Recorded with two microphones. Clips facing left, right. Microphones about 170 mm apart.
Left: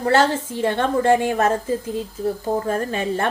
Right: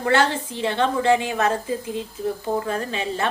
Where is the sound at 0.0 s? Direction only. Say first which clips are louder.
Left 2 dB; 40° left (ahead or behind).